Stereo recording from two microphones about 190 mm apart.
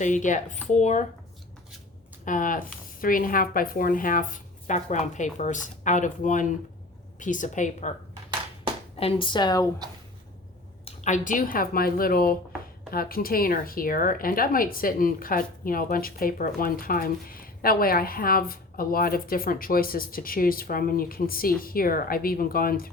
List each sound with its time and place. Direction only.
0.0 s speech: 40° left (ahead or behind)
2.2 s speech: 45° left (ahead or behind)
9.0 s speech: 30° left (ahead or behind)
10.8 s speech: 40° left (ahead or behind)